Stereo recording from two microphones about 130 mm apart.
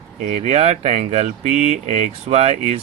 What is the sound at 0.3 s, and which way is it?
Speech, 60° right (ahead or behind).